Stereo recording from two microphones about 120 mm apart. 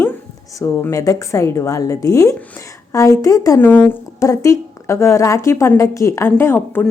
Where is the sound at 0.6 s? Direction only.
25° left (ahead or behind).